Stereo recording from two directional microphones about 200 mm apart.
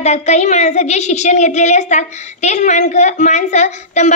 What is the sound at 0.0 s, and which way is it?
A woman's voice, 35° left (ahead or behind).